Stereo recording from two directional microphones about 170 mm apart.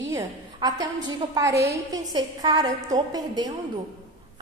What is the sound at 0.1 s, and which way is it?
A woman's voice, 20° right (ahead or behind).